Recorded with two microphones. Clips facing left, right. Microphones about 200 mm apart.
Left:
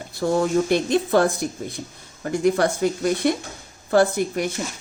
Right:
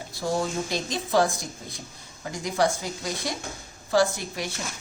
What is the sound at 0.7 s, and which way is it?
A woman's voice, 60° left (ahead or behind).